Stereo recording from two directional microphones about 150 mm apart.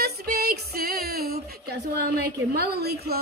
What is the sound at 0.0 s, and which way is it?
Female singing, 90° right.